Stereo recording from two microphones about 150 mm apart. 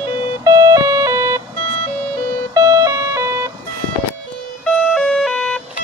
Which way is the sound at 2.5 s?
20° right (ahead or behind).